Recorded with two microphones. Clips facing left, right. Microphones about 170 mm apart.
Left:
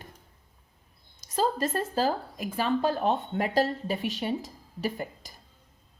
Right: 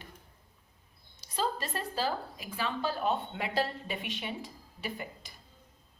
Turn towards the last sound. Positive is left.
turn(degrees=40)  # may be behind; listen again after turning